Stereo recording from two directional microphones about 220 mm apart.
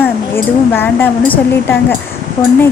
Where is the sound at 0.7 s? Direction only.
10° left (ahead or behind).